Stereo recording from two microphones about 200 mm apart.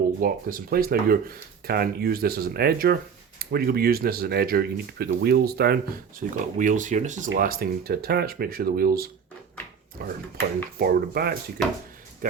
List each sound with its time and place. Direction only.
0.2 s speech: 45° right (ahead or behind)